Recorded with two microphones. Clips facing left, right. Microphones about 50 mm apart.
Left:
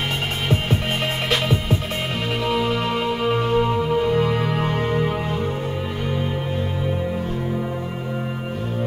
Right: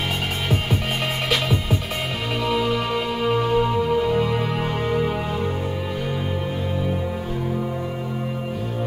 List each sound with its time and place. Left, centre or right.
1.3 s music: centre